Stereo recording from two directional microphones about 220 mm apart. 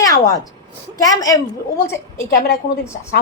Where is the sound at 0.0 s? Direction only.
15° left (ahead or behind).